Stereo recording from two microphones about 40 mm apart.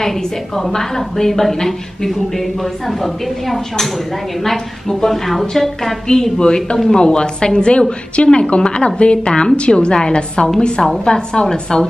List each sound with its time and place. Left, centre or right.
0.6 s a woman's voice: centre